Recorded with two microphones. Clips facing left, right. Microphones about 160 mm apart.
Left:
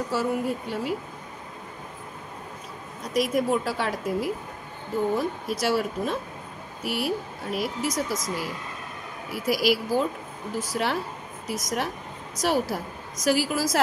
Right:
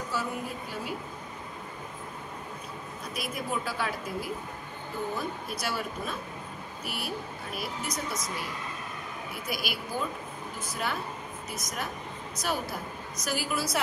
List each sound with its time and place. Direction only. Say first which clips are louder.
0.2 s speech: left 8 dB; 75° left (ahead or behind)
3.1 s a woman's voice: left 11 dB; 90° left
5.1 s a woman's voice: left 7 dB; 90° left